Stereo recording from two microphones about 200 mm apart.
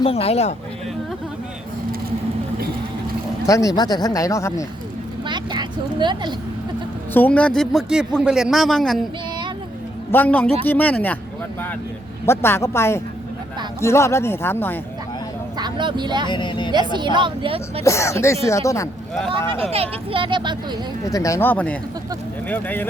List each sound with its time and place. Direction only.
0.0 s speech: 30° left (ahead or behind)
3.4 s speech: 15° left (ahead or behind)
5.3 s speech: 20° right (ahead or behind)
7.1 s a man's voice: 10° left (ahead or behind)
10.1 s speech: 10° left (ahead or behind)
12.2 s speech: 10° left (ahead or behind)
15.5 s speech: 20° right (ahead or behind)
16.3 s a woman's voice: 25° left (ahead or behind)
16.9 s speech: 25° right (ahead or behind)
17.8 s speech: 15° left (ahead or behind)
19.7 s speech: 30° right (ahead or behind)
21.0 s speech: 15° left (ahead or behind)